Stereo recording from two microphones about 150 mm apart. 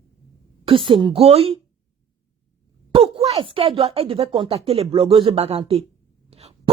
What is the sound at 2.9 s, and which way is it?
Speech, 40° right (ahead or behind).